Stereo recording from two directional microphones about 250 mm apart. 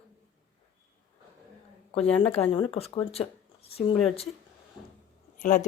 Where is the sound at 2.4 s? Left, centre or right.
Left.